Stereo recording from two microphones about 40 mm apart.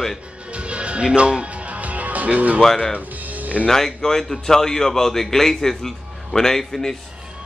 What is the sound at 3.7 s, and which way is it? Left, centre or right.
Speech, centre.